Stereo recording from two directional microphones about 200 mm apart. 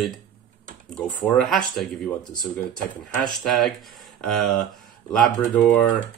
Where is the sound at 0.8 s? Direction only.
Centre (ahead or behind).